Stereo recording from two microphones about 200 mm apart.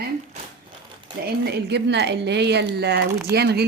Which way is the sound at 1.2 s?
55° right (ahead or behind).